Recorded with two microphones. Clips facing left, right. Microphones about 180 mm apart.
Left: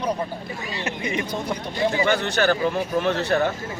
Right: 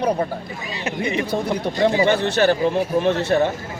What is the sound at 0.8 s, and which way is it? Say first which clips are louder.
Speech: right 5 dB; 30° right (ahead or behind).